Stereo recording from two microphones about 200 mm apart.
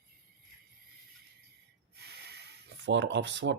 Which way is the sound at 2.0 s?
55° right (ahead or behind).